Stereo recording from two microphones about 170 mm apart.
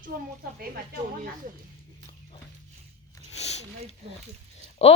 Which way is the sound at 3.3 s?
40° left (ahead or behind).